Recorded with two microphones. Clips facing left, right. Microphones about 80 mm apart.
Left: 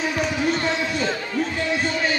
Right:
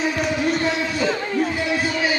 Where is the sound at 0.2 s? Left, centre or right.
Centre.